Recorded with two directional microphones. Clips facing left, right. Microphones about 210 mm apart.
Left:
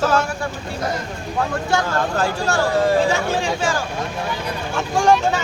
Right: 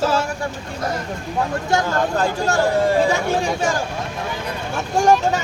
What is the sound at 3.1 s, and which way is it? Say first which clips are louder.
Speech: right 1 dB; 40° right (ahead or behind).